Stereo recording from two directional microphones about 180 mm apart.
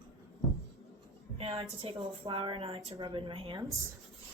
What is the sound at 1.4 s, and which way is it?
A woman's voice, 35° right (ahead or behind).